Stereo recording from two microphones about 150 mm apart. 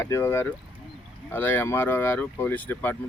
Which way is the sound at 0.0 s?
15° left (ahead or behind).